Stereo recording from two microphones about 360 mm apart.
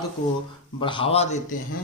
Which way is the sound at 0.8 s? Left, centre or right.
Centre.